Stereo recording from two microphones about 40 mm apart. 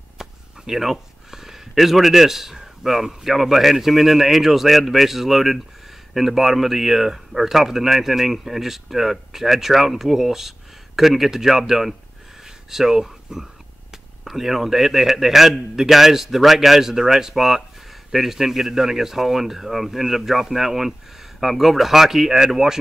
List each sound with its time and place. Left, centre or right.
0.2 s speech: centre
12.4 s a sound: centre
14.2 s speech: centre